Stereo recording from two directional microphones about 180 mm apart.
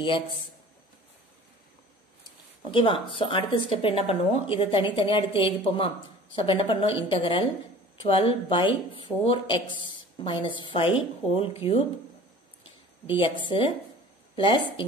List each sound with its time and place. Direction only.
2.7 s speech: 30° left (ahead or behind)
13.0 s a woman's voice: 30° left (ahead or behind)